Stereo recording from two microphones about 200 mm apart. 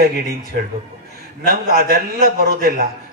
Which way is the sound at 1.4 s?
50° right (ahead or behind).